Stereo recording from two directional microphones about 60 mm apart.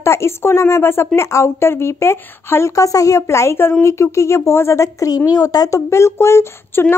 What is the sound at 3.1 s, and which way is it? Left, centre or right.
A woman's voice, left.